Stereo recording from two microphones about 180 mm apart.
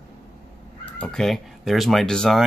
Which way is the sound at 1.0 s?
5° left (ahead or behind).